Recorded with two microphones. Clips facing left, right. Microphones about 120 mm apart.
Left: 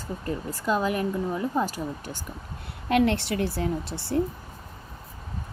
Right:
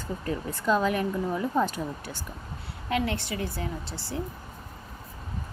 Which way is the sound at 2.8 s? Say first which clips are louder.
Left 6 dB; 65° left (ahead or behind).